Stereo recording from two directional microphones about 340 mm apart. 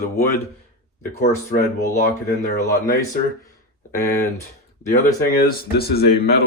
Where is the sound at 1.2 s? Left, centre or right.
Left.